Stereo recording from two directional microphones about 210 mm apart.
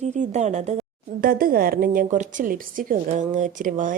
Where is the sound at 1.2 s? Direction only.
45° right (ahead or behind).